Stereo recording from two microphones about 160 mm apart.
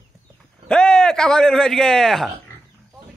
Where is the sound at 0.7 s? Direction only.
5° left (ahead or behind).